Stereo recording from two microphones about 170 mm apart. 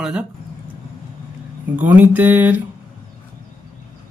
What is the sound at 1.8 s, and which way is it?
Speech, 10° right (ahead or behind).